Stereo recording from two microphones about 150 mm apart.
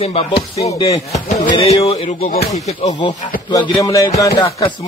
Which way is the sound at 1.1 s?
50° left (ahead or behind).